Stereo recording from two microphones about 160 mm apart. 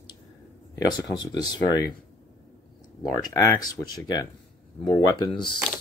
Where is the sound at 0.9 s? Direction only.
25° left (ahead or behind).